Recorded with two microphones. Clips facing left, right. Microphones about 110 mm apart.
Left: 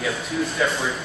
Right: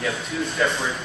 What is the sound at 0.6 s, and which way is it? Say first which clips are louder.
Speech: right 1 dB; 5° left (ahead or behind).